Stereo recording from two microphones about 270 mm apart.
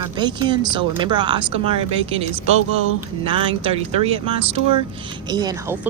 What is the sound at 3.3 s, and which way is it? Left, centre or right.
Speech, centre.